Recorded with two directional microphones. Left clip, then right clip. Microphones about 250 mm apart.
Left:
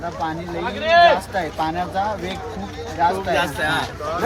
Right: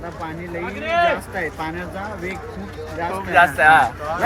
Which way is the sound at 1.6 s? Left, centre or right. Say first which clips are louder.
Left 5 dB; centre.